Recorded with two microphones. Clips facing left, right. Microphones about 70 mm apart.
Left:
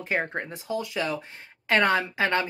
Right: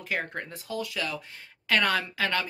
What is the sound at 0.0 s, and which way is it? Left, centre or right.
Speech, left.